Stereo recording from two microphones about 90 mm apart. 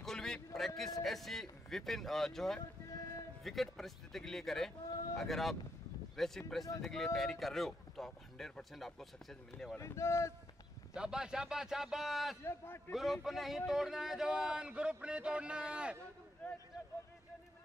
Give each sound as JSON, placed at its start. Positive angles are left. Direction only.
{"t": 0.0, "sound": "a sound", "side_deg": 5}
{"t": 0.6, "sound": "speech", "side_deg": 0}
{"t": 9.8, "sound": "speech", "side_deg": 30}
{"t": 10.9, "sound": "speech", "side_deg": -10}
{"t": 12.4, "sound": "a man's voice", "side_deg": 25}
{"t": 12.9, "sound": "speech", "side_deg": 0}